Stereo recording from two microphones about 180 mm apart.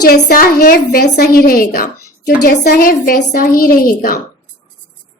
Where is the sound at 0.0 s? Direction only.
60° left (ahead or behind).